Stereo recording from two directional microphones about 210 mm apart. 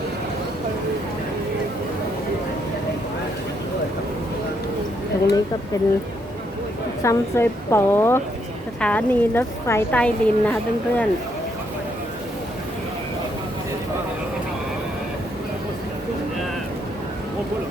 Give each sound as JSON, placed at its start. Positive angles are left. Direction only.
{"t": 5.7, "sound": "a woman's voice", "side_deg": 15}
{"t": 7.0, "sound": "a woman's voice", "side_deg": 15}